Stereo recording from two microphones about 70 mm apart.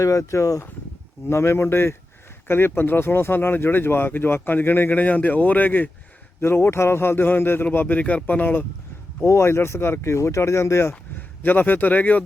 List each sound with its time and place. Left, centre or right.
0.0 s speech: left
6.4 s speech: left
9.2 s speech: left
11.4 s speech: left